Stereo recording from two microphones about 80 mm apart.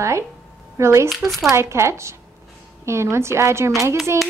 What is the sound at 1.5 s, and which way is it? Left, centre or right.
A woman's voice, right.